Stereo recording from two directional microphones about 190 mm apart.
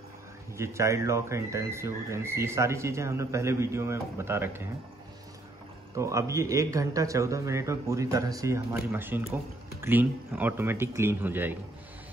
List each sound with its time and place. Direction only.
0.6 s speech: 15° right (ahead or behind)
5.9 s speech: 15° right (ahead or behind)